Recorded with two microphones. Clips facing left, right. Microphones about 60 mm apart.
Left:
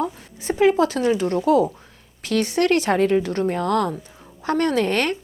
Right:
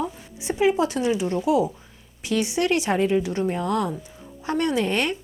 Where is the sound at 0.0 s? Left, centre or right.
Left.